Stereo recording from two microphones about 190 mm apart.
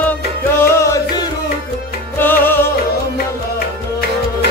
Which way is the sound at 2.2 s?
10° left (ahead or behind).